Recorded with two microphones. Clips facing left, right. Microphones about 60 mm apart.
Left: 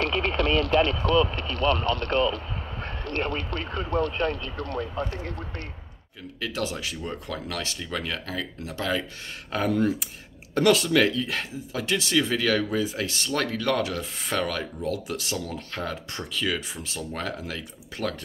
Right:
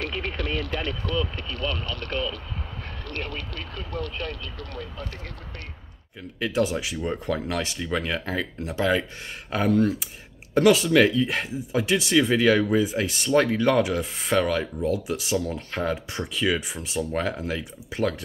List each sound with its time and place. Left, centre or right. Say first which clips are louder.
0.0 s speech: left 5 dB; left
6.4 s speech: right 6 dB; centre